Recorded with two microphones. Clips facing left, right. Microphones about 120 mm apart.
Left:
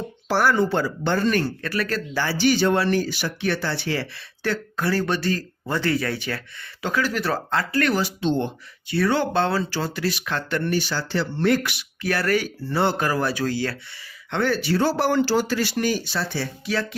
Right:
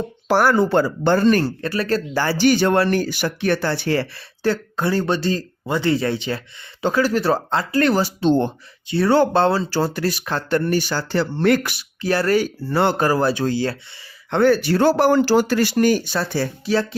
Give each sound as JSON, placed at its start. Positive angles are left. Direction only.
{"t": 0.3, "sound": "speech", "side_deg": -45}
{"t": 2.1, "sound": "speech", "side_deg": -50}
{"t": 4.4, "sound": "speech", "side_deg": -25}
{"t": 14.3, "sound": "speech", "side_deg": -40}